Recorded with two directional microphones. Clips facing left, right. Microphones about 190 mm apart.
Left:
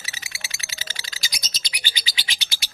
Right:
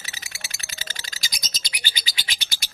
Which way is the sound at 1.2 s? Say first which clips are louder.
Even; 45° right (ahead or behind).